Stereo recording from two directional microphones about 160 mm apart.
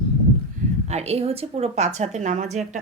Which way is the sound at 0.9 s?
40° right (ahead or behind).